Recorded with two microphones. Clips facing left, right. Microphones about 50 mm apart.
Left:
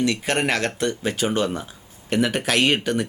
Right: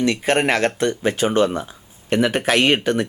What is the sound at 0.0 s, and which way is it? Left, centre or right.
Speech, centre.